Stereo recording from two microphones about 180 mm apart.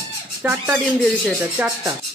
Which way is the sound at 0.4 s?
10° right (ahead or behind).